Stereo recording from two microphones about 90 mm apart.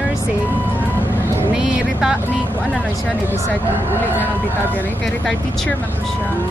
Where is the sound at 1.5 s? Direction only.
10° right (ahead or behind).